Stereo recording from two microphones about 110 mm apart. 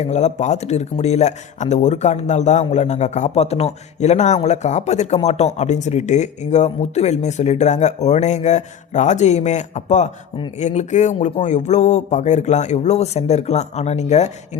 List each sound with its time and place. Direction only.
0.0 s speech: 90° left